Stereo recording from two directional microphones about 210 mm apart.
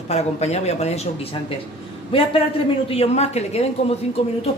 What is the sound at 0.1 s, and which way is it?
A man's voice, 30° left (ahead or behind).